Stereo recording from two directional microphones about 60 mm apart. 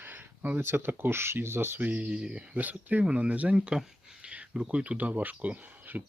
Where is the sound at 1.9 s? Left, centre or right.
Right.